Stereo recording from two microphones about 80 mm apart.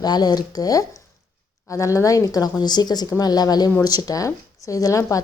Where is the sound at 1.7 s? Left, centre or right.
Left.